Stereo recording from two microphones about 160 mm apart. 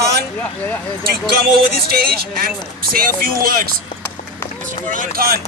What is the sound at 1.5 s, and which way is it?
Speech, 70° right (ahead or behind).